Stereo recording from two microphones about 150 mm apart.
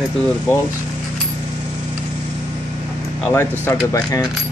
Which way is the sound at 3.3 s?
20° left (ahead or behind).